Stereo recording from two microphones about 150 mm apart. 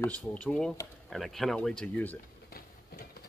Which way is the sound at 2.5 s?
90° left.